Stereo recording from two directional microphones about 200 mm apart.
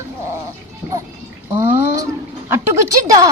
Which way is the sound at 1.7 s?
10° right (ahead or behind).